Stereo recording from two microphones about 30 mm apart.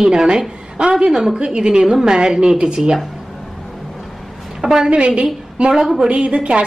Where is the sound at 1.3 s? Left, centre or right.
Right.